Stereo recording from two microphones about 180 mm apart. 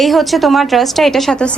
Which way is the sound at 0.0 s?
Centre (ahead or behind).